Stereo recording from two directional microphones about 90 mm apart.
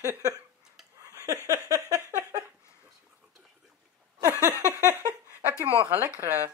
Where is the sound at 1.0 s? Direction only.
40° right (ahead or behind).